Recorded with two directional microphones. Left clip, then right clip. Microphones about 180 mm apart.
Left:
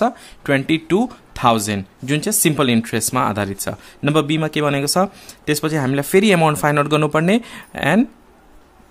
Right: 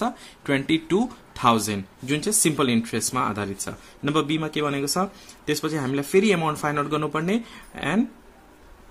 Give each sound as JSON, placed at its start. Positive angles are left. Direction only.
{"t": 0.0, "sound": "speech", "side_deg": 30}